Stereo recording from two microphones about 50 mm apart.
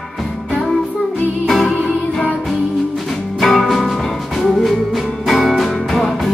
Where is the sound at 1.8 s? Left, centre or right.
Centre.